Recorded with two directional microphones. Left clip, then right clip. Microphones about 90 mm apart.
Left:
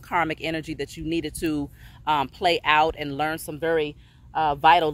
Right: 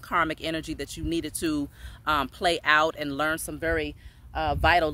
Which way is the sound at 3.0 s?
50° right (ahead or behind).